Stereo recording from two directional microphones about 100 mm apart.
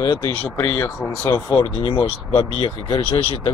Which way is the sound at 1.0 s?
35° left (ahead or behind).